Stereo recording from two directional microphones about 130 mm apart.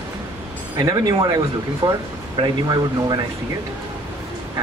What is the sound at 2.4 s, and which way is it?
Speech, 30° right (ahead or behind).